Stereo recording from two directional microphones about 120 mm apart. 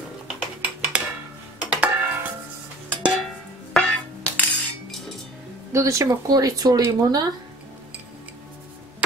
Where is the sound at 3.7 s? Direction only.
10° left (ahead or behind).